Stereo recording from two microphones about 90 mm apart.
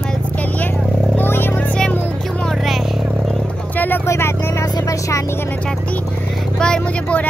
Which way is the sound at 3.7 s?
20° left (ahead or behind).